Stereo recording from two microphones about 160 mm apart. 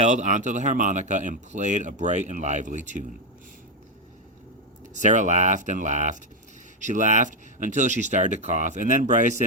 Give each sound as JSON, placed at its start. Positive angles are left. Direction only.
{"t": 0.0, "sound": "speech", "side_deg": -50}
{"t": 4.9, "sound": "speech", "side_deg": -50}